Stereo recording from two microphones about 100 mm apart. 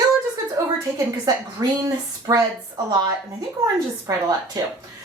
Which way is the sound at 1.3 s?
40° right (ahead or behind).